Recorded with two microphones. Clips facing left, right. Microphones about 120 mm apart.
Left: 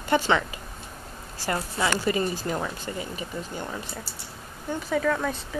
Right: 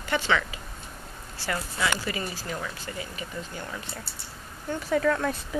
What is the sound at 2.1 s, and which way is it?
Speech, 30° left (ahead or behind).